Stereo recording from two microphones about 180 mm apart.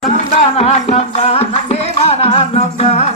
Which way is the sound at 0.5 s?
35° left (ahead or behind).